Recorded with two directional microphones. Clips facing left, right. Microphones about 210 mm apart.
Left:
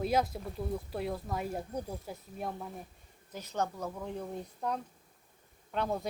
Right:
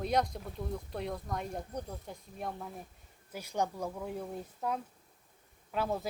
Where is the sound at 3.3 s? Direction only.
10° right (ahead or behind).